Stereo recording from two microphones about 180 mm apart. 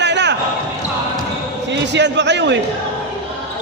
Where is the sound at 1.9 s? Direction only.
75° right (ahead or behind).